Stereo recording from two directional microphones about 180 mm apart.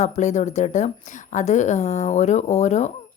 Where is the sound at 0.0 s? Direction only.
40° left (ahead or behind).